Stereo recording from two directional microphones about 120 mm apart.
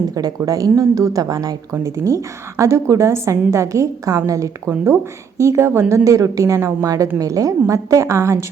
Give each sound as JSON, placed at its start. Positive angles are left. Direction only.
{"t": 0.1, "sound": "a woman's voice", "side_deg": -35}